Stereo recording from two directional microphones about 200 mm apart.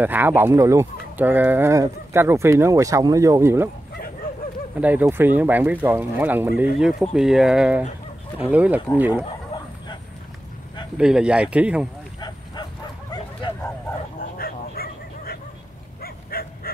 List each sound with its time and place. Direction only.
0.0 s speech: 10° right (ahead or behind)
4.7 s speech: 10° right (ahead or behind)
11.0 s speech: 5° right (ahead or behind)
12.2 s cattle: 20° left (ahead or behind)
14.2 s a sound: 50° left (ahead or behind)
16.0 s livestock: 50° left (ahead or behind)